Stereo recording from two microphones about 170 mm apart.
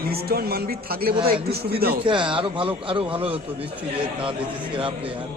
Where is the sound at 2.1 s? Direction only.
30° right (ahead or behind).